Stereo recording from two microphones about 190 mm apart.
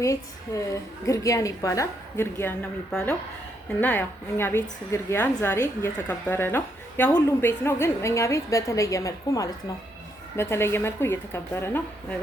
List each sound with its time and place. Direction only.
0.0 s a woman's voice: 15° left (ahead or behind)